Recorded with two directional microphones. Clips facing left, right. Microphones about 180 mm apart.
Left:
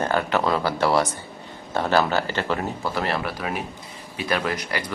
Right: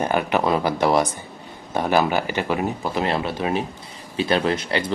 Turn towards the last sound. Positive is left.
turn(degrees=-25)  # may be behind; listen again after turning